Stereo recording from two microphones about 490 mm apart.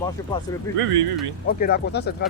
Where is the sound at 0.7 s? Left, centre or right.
Right.